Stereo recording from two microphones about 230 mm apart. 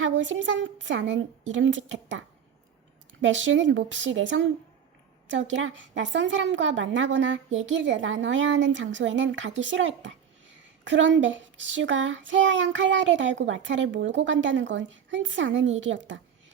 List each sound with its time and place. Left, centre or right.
0.0 s a woman's voice: right